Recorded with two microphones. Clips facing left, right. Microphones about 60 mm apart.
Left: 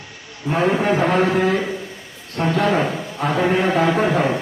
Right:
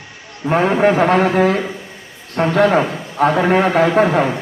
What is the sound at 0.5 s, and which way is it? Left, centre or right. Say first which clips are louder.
A man's voice: right 4 dB; right.